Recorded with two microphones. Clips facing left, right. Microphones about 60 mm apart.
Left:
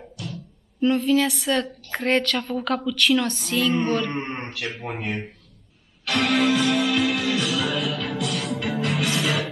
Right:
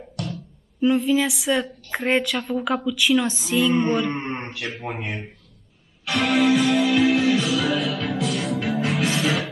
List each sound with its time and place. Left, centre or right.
0.7 s a woman's voice: centre
6.0 s music: centre
7.0 s music: centre
8.3 s music: centre
8.5 s music: right
9.1 s music: centre